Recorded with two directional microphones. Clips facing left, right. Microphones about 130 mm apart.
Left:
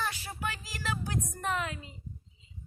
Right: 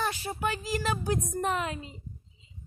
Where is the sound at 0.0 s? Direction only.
25° right (ahead or behind).